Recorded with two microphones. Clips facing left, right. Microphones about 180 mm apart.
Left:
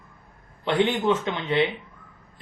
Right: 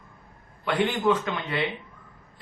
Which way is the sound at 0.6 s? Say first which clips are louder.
Left 2 dB; 25° left (ahead or behind).